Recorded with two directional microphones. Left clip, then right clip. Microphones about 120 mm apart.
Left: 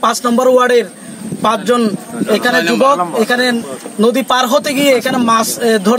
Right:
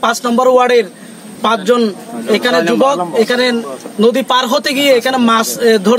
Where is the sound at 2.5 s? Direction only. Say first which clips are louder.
Right 1 dB; 65° right (ahead or behind).